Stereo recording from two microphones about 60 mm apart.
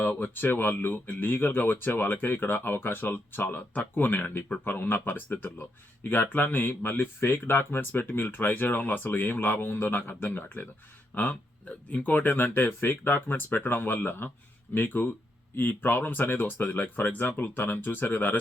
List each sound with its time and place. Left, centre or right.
0.0 s speech: left